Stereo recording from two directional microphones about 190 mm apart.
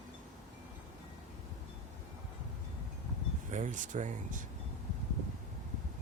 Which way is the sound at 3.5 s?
40° right (ahead or behind).